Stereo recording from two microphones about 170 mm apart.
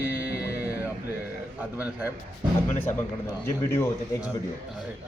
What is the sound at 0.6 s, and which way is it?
Music, 10° right (ahead or behind).